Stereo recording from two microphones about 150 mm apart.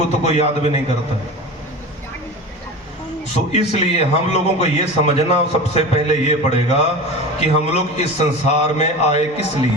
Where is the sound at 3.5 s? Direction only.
45° left (ahead or behind).